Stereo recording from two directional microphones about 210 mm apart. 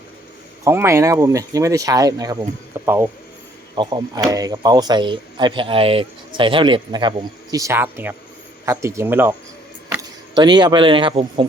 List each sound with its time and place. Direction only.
0.6 s speech: 10° right (ahead or behind)